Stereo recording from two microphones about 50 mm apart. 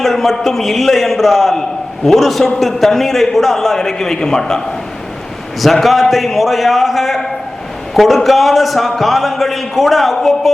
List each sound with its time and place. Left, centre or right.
0.0 s a man's voice: centre
5.5 s a man's voice: centre